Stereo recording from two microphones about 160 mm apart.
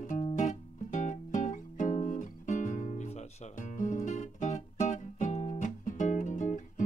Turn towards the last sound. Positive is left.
turn(degrees=50)  # may be behind; listen again after turning